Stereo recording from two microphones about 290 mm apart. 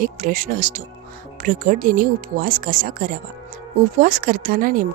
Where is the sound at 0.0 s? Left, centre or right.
Right.